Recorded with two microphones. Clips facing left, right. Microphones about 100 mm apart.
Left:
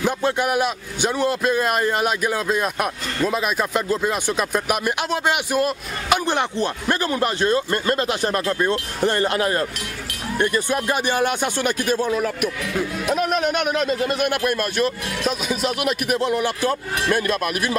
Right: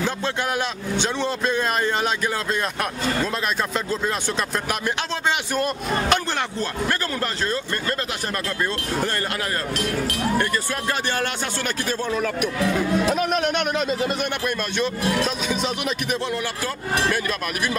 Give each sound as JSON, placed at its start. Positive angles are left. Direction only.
{"t": 0.0, "sound": "speech", "side_deg": 15}